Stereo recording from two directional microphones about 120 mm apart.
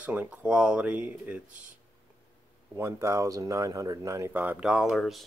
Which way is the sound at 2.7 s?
25° right (ahead or behind).